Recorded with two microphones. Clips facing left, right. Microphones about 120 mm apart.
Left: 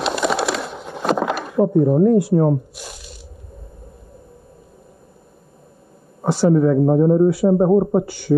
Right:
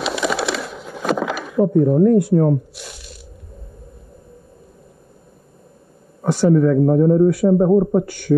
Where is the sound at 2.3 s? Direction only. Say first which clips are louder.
Right 1 dB; 20° left (ahead or behind).